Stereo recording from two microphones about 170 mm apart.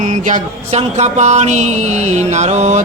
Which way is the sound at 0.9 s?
40° right (ahead or behind).